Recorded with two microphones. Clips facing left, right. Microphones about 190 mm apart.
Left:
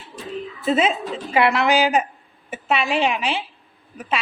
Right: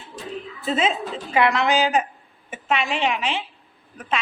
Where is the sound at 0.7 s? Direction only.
15° left (ahead or behind).